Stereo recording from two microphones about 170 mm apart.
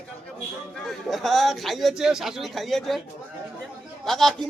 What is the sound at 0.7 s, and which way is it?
Speech, centre (ahead or behind).